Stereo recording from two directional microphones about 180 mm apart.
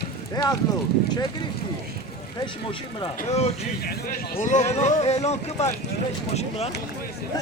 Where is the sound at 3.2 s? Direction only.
35° left (ahead or behind).